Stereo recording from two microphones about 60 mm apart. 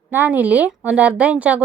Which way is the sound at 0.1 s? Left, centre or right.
Right.